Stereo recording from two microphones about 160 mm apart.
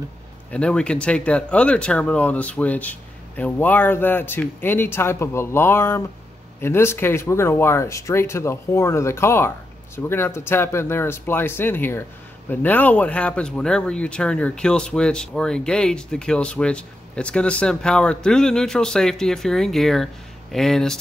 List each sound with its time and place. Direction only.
0.5 s speech: 5° left (ahead or behind)